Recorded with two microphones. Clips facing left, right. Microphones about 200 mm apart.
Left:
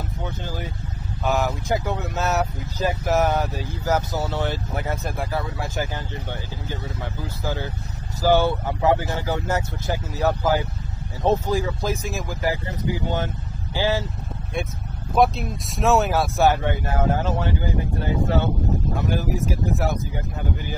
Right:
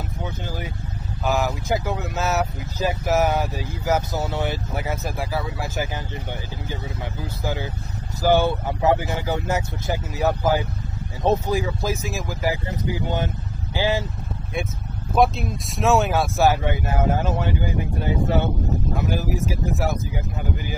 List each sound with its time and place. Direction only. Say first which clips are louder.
1.2 s speech: even; centre (ahead or behind)
13.0 s speech: even; 15° right (ahead or behind)
15.1 s speech: even; centre (ahead or behind)
16.6 s speech: even; 10° right (ahead or behind)